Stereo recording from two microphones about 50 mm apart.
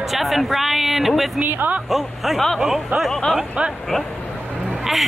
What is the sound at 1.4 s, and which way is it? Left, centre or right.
Speech, right.